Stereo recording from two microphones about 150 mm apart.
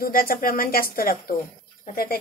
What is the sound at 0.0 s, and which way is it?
A woman's voice, 75° left (ahead or behind).